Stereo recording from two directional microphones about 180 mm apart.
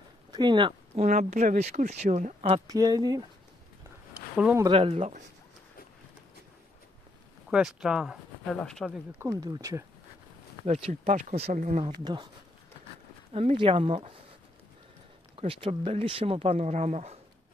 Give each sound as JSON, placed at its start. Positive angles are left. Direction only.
{"t": 0.3, "sound": "speech", "side_deg": -25}
{"t": 1.0, "sound": "speech", "side_deg": -45}
{"t": 2.6, "sound": "speech", "side_deg": -20}
{"t": 4.6, "sound": "speech", "side_deg": -30}
{"t": 7.4, "sound": "speech", "side_deg": -5}
{"t": 9.2, "sound": "speech", "side_deg": -20}
{"t": 10.6, "sound": "speech", "side_deg": -40}
{"t": 12.0, "sound": "speech", "side_deg": -25}
{"t": 13.3, "sound": "speech", "side_deg": -30}
{"t": 15.3, "sound": "speech", "side_deg": -30}